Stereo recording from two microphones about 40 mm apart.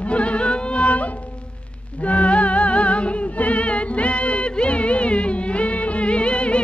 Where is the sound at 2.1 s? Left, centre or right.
Left.